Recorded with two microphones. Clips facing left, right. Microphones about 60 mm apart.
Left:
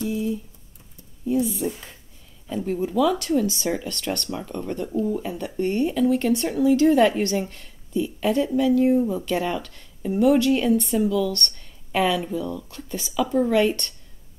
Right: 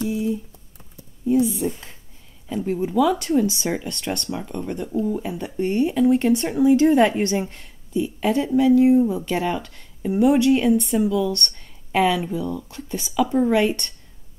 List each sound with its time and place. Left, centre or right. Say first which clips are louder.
0.1 s computer keyboard: right 2 dB; centre
1.2 s speech: right 3 dB; centre
2.6 s speech: right 2 dB; right
13.2 s speech: right 1 dB; right